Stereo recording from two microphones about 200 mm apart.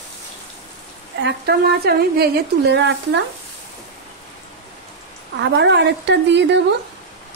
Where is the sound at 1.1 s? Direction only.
55° right (ahead or behind).